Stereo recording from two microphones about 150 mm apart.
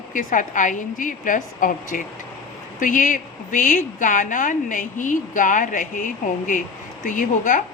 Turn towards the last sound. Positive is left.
turn(degrees=60)  # may be behind; listen again after turning